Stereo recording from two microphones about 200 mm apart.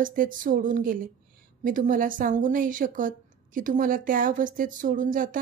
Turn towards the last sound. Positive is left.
turn(degrees=-40)  # may be behind; listen again after turning